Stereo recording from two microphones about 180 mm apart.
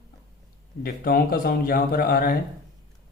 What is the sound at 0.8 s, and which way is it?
A man's voice, 55° left (ahead or behind).